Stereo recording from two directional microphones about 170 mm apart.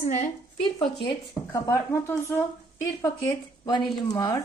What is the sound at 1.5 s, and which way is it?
Speech, 15° left (ahead or behind).